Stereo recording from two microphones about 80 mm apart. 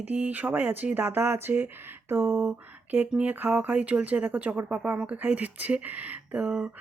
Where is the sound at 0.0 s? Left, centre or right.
Centre.